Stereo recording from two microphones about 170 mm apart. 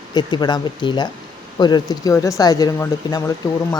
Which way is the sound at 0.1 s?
25° left (ahead or behind).